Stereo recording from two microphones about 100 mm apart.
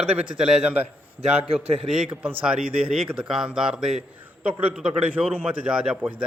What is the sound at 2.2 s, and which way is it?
Speech, 15° right (ahead or behind).